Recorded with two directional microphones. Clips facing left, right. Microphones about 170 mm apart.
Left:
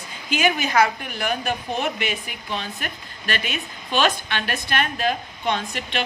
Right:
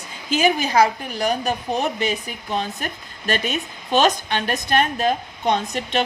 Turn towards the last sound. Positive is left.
turn(degrees=-40)  # may be behind; listen again after turning